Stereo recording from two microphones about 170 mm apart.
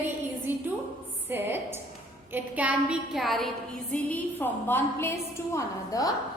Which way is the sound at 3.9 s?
10° left (ahead or behind).